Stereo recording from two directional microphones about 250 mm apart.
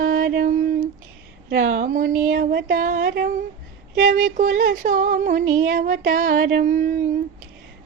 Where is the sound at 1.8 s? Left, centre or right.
Right.